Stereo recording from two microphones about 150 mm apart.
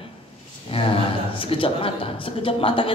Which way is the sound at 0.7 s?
40° left (ahead or behind).